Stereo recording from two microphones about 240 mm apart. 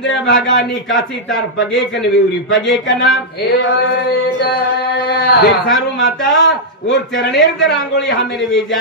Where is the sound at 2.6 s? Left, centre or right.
Centre.